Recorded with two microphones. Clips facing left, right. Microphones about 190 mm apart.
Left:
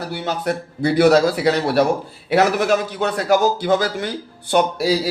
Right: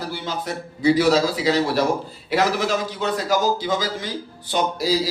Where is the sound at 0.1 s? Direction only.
65° left (ahead or behind).